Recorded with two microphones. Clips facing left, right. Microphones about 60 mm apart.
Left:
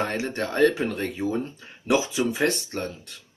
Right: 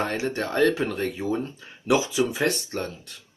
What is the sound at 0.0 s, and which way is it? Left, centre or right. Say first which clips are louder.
Speech: even; left.